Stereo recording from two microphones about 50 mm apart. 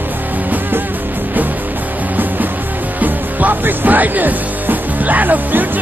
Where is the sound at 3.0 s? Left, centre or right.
Right.